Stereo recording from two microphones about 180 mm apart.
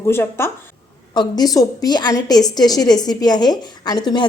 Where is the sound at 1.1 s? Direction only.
25° left (ahead or behind).